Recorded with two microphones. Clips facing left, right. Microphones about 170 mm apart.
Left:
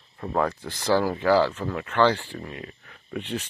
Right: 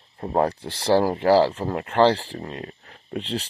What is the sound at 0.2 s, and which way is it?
Speech, 35° right (ahead or behind).